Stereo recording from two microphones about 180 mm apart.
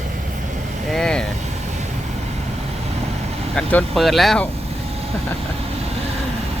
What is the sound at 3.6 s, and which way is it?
Speech, 5° left (ahead or behind).